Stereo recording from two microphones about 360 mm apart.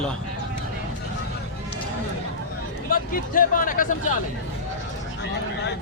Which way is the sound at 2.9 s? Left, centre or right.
Left.